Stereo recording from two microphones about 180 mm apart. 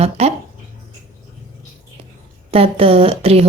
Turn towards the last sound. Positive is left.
turn(degrees=-35)  # may be behind; listen again after turning